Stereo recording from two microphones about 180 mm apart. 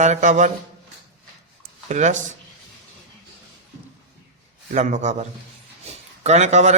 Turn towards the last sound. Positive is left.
turn(degrees=-40)  # may be behind; listen again after turning